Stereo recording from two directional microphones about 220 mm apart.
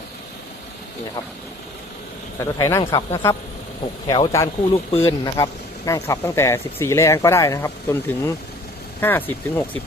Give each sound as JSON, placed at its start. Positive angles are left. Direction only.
{"t": 2.4, "sound": "speech", "side_deg": 15}